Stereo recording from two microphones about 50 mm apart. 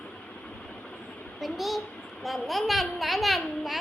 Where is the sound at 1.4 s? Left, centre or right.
Centre.